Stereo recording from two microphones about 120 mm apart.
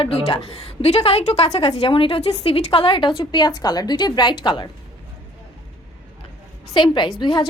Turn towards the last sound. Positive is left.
turn(degrees=40)  # may be behind; listen again after turning